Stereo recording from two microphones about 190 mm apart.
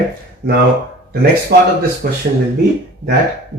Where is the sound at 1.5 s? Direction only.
55° right (ahead or behind).